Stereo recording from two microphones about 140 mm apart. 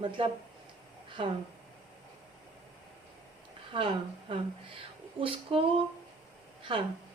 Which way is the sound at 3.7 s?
40° right (ahead or behind).